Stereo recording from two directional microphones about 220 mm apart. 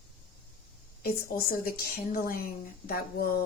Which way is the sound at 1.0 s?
40° left (ahead or behind).